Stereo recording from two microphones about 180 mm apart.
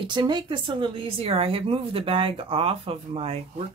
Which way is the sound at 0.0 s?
25° right (ahead or behind).